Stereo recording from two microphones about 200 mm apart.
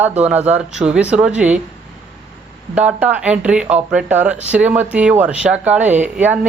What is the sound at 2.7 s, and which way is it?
Speech, 5° right (ahead or behind).